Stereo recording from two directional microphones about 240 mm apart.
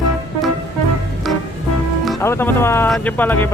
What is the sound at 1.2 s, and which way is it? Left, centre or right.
Music, centre.